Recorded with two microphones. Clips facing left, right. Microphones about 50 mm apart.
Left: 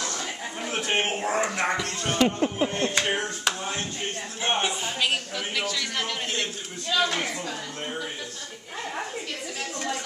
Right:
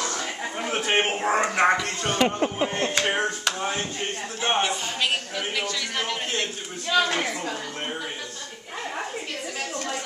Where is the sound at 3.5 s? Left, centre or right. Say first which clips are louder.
Right 4 dB; right.